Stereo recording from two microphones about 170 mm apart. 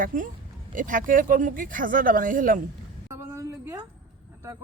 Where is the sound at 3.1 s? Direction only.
15° right (ahead or behind).